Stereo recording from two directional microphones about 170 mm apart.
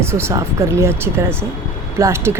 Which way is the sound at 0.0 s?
15° right (ahead or behind).